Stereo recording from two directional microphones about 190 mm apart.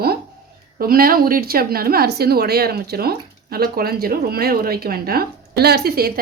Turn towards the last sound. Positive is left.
turn(degrees=-55)  # may be behind; listen again after turning